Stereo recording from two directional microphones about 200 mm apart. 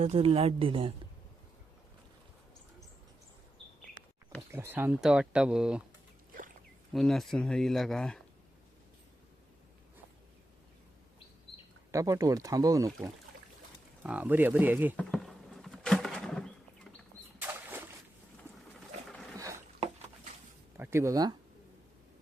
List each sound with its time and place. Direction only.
0.0 s speech: 30° right (ahead or behind)
4.5 s speech: 10° right (ahead or behind)
6.9 s speech: centre (ahead or behind)
11.9 s speech: 15° right (ahead or behind)
14.0 s speech: 5° right (ahead or behind)
14.9 s a sound: centre (ahead or behind)
17.4 s boat: 10° right (ahead or behind)
19.4 s a sound: 15° right (ahead or behind)
20.7 s speech: 10° right (ahead or behind)